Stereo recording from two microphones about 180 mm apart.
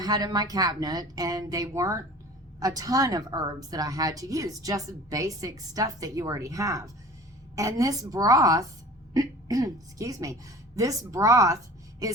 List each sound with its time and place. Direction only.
0.0 s a woman's voice: 20° right (ahead or behind)